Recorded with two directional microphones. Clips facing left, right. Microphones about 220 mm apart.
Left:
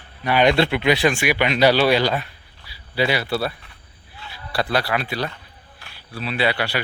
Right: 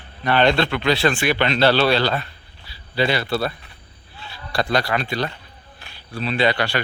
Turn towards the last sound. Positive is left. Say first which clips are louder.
# right 2 dB
turn(degrees=10)  # may be behind; listen again after turning